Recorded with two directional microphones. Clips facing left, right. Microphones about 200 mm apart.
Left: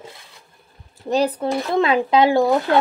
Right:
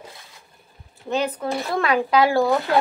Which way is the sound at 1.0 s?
35° left (ahead or behind).